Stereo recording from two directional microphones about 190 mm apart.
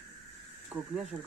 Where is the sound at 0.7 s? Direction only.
10° right (ahead or behind).